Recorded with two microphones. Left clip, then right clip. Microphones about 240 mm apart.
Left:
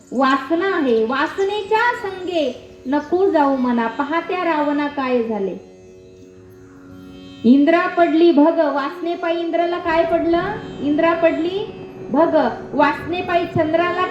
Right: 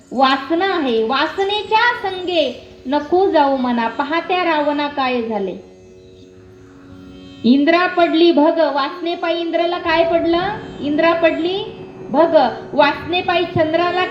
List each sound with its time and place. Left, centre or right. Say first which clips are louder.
0.2 s a woman's voice: right 2 dB; right
7.4 s a woman's voice: right 1 dB; right
10.6 s music: left 1 dB; centre
10.9 s a woman's voice: right 2 dB; right